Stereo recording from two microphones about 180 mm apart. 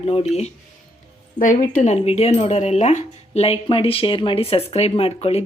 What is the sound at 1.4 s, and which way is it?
Speech, 45° left (ahead or behind).